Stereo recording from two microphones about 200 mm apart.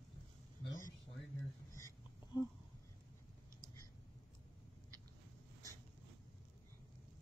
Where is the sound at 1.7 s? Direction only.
15° left (ahead or behind).